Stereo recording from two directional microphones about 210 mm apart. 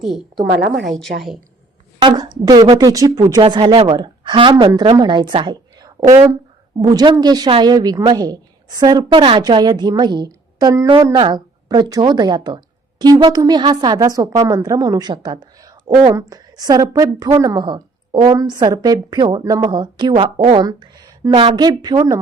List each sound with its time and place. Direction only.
0.0 s a woman's voice: centre (ahead or behind)
0.5 s a woman's voice: 55° right (ahead or behind)
0.9 s a woman's voice: centre (ahead or behind)
2.0 s a woman's voice: 20° right (ahead or behind)